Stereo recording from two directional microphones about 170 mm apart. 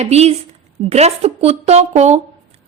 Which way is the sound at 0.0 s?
40° right (ahead or behind).